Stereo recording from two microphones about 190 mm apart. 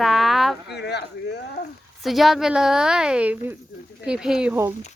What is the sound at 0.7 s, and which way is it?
Speech, 60° left (ahead or behind).